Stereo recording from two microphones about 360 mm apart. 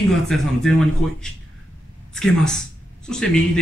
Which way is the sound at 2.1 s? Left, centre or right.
Centre.